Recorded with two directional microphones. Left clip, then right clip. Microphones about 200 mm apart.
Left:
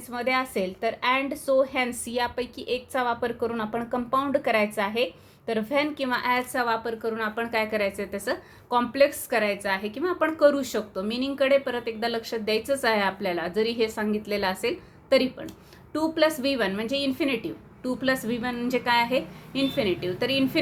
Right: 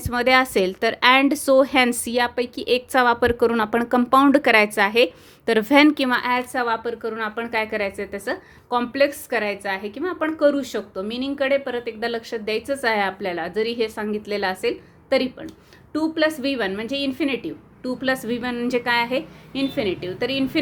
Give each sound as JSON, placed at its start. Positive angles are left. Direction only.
{"t": 0.0, "sound": "a woman's voice", "side_deg": -50}